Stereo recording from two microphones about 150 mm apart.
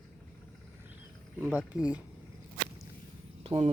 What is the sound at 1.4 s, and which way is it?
Speech, 10° right (ahead or behind).